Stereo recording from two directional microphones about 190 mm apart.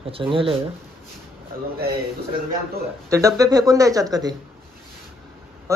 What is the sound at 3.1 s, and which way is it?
Speech, 15° right (ahead or behind).